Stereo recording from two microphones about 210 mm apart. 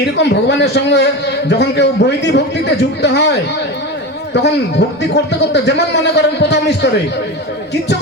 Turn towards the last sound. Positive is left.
turn(degrees=55)  # may be behind; listen again after turning